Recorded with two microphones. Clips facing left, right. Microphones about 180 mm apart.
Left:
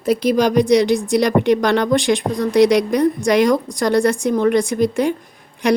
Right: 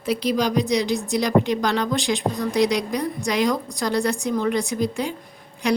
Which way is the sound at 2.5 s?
75° left (ahead or behind).